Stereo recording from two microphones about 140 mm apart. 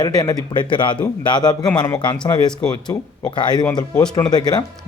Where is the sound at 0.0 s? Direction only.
30° left (ahead or behind).